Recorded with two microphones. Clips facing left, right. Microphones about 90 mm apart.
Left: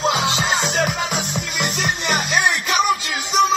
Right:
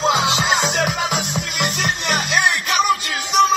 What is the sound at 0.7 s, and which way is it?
Music, centre (ahead or behind).